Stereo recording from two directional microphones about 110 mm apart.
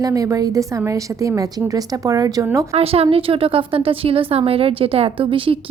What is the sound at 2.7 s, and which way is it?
A woman's voice, 65° right (ahead or behind).